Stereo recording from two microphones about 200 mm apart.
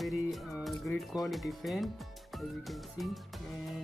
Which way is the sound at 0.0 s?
Centre (ahead or behind).